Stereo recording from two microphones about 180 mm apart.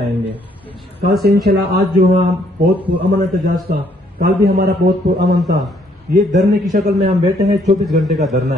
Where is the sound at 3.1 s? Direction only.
60° right (ahead or behind).